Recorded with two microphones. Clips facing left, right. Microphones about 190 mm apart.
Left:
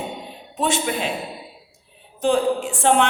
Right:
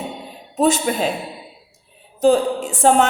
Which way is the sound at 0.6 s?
40° right (ahead or behind).